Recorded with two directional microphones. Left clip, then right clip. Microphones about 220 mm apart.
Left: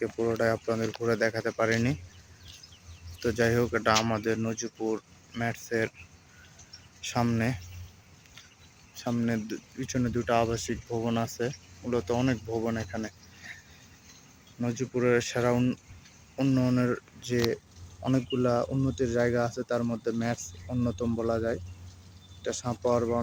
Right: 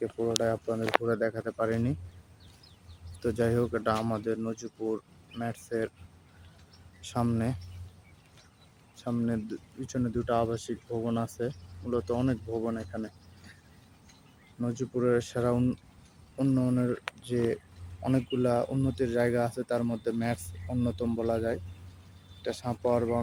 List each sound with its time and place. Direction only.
0.2 s speech: 5° left (ahead or behind)
3.2 s speech: centre (ahead or behind)
7.0 s speech: centre (ahead or behind)
9.2 s speech: centre (ahead or behind)
14.6 s speech: 5° left (ahead or behind)